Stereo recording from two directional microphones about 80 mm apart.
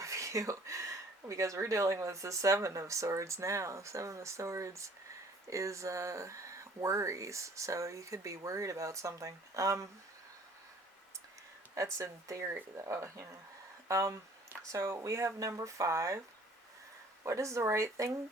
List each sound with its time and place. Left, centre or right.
0.0 s speech: right
11.9 s speech: right
17.2 s speech: right